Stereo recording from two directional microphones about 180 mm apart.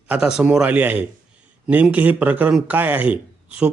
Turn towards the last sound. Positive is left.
turn(degrees=-5)  # may be behind; listen again after turning